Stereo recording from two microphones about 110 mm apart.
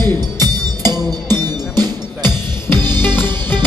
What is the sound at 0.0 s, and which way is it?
Music, 40° right (ahead or behind).